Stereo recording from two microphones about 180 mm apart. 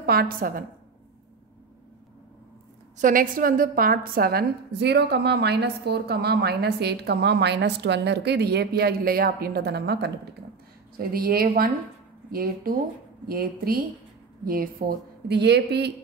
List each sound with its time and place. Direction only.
0.0 s a woman's voice: 60° right (ahead or behind)
3.0 s a woman's voice: 50° right (ahead or behind); by 10.1 s 70° right (ahead or behind)
11.0 s a woman's voice: 55° right (ahead or behind)